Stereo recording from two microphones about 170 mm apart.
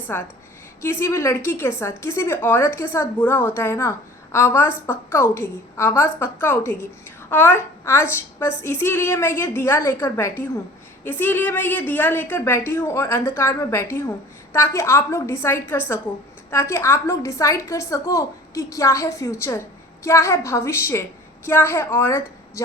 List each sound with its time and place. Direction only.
0.1 s a woman's voice: 15° left (ahead or behind)